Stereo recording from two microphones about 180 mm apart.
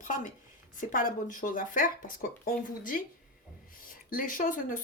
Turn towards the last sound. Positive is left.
turn(degrees=50)  # may be behind; listen again after turning